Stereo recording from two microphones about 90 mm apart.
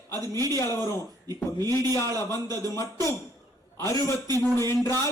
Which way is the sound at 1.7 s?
40° right (ahead or behind).